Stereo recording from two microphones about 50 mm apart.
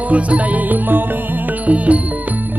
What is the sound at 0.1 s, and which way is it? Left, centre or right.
Music, right.